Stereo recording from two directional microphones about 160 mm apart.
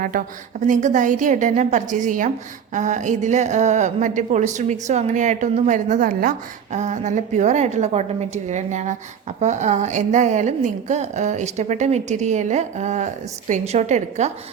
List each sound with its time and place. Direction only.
0.0 s a woman's voice: 55° right (ahead or behind)